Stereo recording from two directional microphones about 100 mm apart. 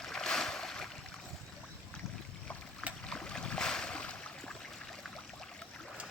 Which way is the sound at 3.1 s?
5° left (ahead or behind).